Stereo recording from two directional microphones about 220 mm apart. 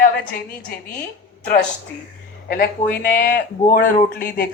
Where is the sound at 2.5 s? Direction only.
40° left (ahead or behind).